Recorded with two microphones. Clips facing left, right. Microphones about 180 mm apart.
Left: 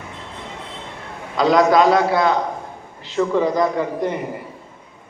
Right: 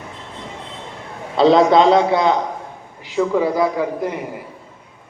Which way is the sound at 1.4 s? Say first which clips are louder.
Right 2 dB; 25° right (ahead or behind).